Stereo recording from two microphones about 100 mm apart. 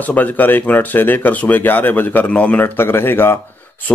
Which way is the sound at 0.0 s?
15° left (ahead or behind).